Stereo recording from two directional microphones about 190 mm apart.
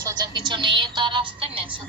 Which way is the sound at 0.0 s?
25° right (ahead or behind).